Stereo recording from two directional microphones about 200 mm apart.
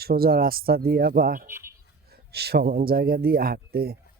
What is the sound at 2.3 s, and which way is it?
Speech, 55° right (ahead or behind).